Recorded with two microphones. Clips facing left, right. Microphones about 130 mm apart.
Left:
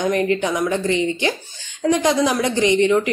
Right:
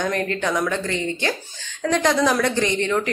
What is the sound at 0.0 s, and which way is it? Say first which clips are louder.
A woman's voice: left 4 dB; 15° left (ahead or behind).